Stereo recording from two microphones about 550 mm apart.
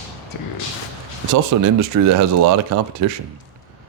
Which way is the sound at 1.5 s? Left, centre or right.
Right.